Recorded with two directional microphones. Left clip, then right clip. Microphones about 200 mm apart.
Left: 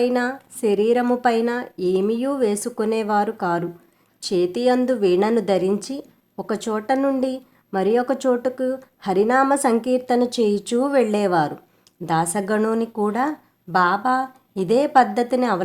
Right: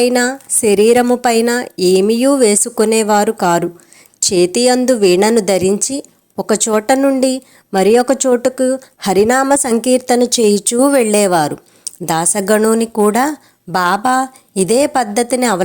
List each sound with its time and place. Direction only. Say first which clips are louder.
0.0 s speech: right 7 dB; 35° right (ahead or behind)